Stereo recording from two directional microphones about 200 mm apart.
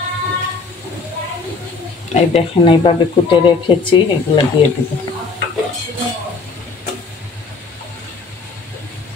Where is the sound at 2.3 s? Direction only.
25° left (ahead or behind).